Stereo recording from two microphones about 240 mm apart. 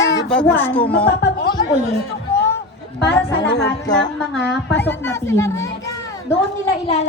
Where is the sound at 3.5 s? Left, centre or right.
Left.